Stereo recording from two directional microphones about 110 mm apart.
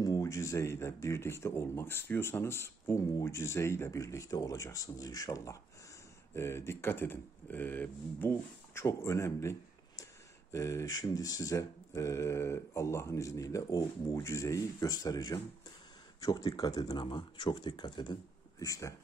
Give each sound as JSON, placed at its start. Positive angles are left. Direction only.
{"t": 0.0, "sound": "speech", "side_deg": 30}
{"t": 17.0, "sound": "speech", "side_deg": 45}
{"t": 18.6, "sound": "speech", "side_deg": 30}